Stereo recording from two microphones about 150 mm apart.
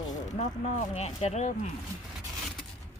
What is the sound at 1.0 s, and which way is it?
Speech, 45° left (ahead or behind).